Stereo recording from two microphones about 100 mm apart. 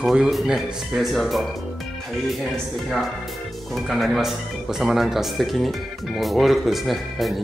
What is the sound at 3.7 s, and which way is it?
Speech, centre (ahead or behind).